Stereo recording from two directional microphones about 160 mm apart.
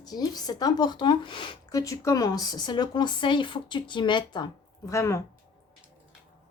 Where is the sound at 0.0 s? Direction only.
25° left (ahead or behind).